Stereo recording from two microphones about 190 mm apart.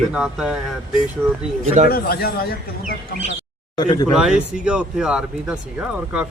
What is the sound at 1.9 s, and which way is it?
Speech, 55° left (ahead or behind).